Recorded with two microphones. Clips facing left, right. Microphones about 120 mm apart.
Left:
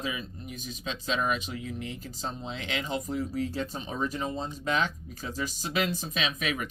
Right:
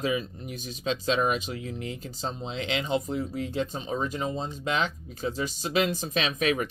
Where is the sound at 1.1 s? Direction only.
30° right (ahead or behind).